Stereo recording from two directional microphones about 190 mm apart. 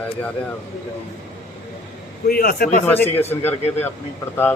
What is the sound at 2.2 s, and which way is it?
Speech, 50° left (ahead or behind).